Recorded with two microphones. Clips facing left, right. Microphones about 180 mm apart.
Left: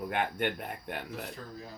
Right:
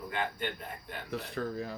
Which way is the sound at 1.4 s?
75° right (ahead or behind).